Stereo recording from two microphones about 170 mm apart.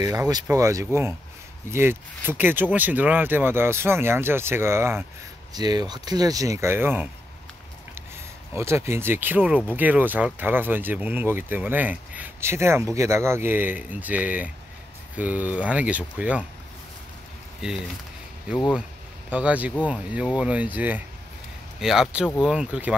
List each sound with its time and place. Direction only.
0.0 s speech: 20° right (ahead or behind)
8.5 s speech: 15° right (ahead or behind)
17.6 s speech: 5° right (ahead or behind)
19.3 s a man's voice: 10° right (ahead or behind)